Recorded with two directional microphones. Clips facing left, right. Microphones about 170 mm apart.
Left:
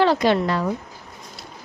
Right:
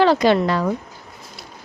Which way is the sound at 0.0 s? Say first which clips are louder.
Right 3 dB; 90° right.